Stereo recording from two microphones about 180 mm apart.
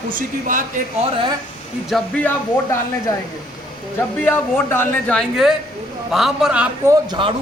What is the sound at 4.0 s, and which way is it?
A man's voice, 10° left (ahead or behind).